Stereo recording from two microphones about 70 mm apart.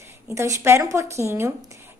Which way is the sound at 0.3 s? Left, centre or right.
Right.